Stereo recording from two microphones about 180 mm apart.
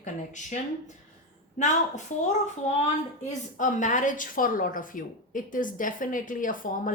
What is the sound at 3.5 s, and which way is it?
A woman's voice, 45° left (ahead or behind).